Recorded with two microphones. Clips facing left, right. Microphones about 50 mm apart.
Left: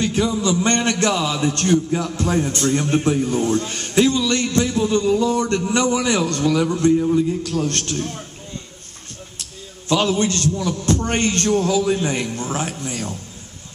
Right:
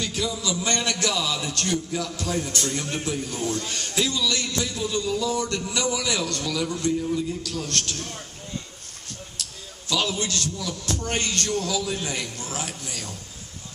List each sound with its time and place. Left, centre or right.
0.0 s a man's voice: left
7.9 s a man's voice: centre
9.8 s a man's voice: left
11.1 s a man's voice: left